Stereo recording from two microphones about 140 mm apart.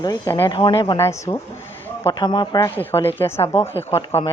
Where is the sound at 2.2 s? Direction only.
35° left (ahead or behind).